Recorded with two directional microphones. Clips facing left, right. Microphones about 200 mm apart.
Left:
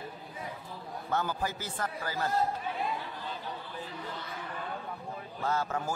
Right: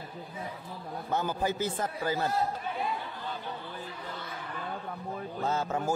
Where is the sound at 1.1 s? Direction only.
20° right (ahead or behind).